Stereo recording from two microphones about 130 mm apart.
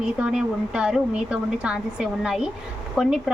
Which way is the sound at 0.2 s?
5° right (ahead or behind).